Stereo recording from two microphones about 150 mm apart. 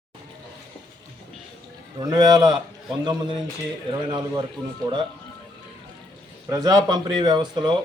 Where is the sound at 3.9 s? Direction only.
30° right (ahead or behind).